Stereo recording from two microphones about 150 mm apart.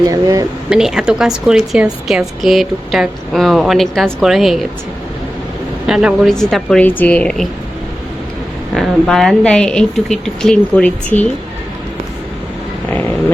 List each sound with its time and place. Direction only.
0.1 s speech: 20° right (ahead or behind)
0.7 s a woman's voice: 5° right (ahead or behind)
5.8 s a woman's voice: 5° right (ahead or behind)
8.7 s a woman's voice: centre (ahead or behind)